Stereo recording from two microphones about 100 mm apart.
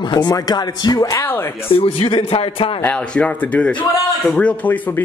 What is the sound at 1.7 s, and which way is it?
A man's voice, 70° left (ahead or behind).